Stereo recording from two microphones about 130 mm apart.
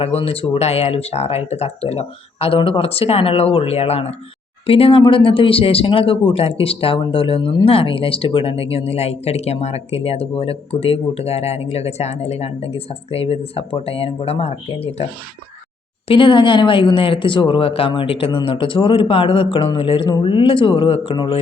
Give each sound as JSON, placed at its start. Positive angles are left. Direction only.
{"t": 0.0, "sound": "speech", "side_deg": 50}
{"t": 16.0, "sound": "speech", "side_deg": 40}